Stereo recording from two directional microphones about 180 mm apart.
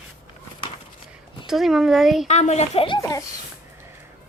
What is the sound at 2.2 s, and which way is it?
Speech, 40° left (ahead or behind).